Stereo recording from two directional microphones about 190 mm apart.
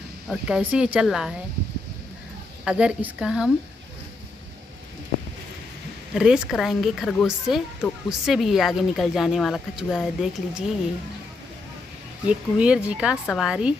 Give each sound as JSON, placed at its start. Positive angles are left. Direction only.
{"t": 0.3, "sound": "speech", "side_deg": -5}
{"t": 2.6, "sound": "speech", "side_deg": -5}
{"t": 6.1, "sound": "speech", "side_deg": -5}
{"t": 12.3, "sound": "speech", "side_deg": -5}